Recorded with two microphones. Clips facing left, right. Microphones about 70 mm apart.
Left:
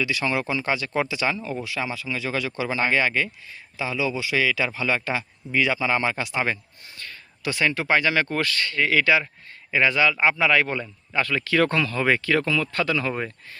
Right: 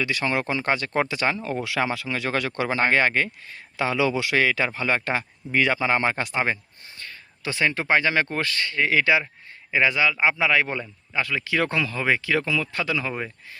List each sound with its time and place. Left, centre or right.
0.0 s speech: right
1.6 s speech: right
3.8 s speech: right
4.4 s a man's voice: right; by 13.6 s centre